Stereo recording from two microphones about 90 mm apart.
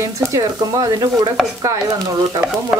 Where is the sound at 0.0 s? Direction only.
35° right (ahead or behind).